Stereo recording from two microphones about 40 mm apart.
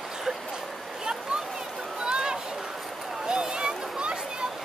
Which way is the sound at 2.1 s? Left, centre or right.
Centre.